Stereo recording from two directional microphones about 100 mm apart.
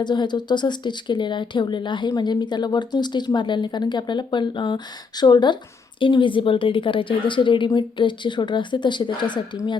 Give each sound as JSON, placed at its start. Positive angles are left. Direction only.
{"t": 0.0, "sound": "a woman's voice", "side_deg": 50}